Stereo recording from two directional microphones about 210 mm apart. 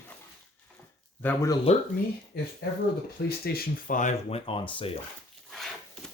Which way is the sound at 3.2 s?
50° left (ahead or behind).